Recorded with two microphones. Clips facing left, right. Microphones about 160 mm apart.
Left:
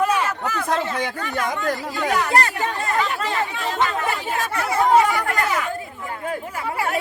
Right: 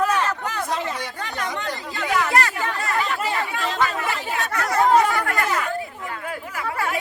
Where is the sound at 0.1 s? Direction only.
10° left (ahead or behind).